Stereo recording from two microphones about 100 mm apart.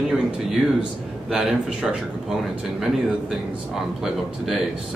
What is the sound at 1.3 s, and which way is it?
Speech, 5° right (ahead or behind).